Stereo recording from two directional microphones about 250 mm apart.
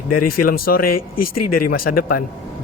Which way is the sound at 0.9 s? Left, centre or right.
Left.